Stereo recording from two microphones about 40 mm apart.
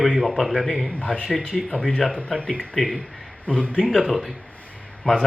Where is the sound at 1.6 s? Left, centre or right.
Left.